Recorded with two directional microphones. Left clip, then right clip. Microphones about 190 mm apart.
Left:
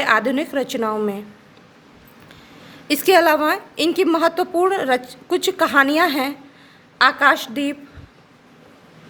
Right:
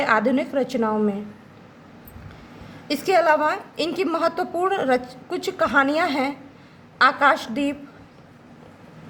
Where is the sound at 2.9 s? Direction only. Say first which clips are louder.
Left 4 dB; 15° left (ahead or behind).